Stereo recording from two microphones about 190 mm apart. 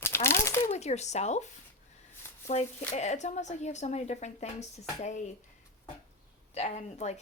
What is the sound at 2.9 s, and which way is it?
Speech, 35° left (ahead or behind).